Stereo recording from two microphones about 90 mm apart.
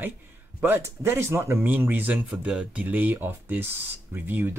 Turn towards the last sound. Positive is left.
turn(degrees=-25)  # may be behind; listen again after turning